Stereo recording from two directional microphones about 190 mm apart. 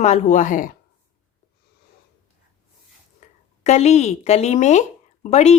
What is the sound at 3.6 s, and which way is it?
Speech, 35° left (ahead or behind).